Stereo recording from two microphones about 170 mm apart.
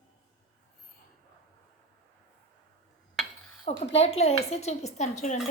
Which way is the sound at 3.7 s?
40° left (ahead or behind).